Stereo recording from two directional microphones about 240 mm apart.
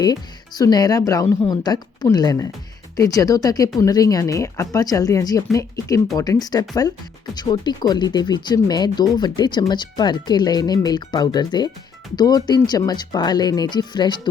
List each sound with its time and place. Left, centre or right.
0.0 s speech: centre